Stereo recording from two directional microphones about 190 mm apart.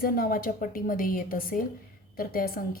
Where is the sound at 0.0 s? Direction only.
50° left (ahead or behind).